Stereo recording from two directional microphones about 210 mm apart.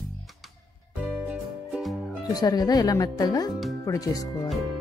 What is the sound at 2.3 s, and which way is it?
Speech, 20° left (ahead or behind).